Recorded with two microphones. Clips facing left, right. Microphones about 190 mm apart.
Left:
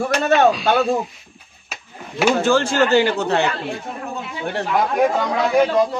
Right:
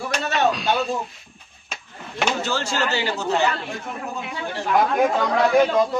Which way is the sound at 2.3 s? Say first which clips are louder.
Left 8 dB; 50° left (ahead or behind).